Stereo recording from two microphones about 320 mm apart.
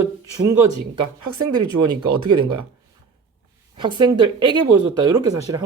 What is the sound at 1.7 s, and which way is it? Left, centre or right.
Speech, right.